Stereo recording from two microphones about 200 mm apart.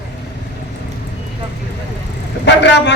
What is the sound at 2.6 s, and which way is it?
Speech, 60° left (ahead or behind).